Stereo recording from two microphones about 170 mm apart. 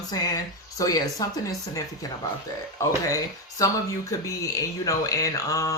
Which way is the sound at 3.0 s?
20° left (ahead or behind).